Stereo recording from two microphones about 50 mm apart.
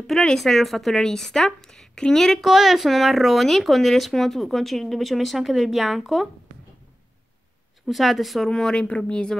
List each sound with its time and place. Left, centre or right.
0.4 s a woman's voice: centre
2.4 s speech: centre
7.8 s speech: centre
8.5 s a woman's voice: centre
8.8 s speech: left